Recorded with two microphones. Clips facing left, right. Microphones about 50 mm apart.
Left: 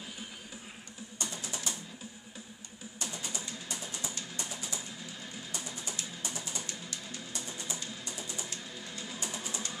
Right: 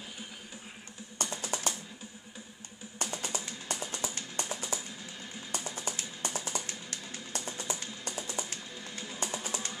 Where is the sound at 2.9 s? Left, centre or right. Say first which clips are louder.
Right 4 dB; right.